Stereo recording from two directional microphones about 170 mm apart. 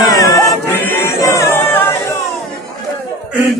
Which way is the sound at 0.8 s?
15° left (ahead or behind).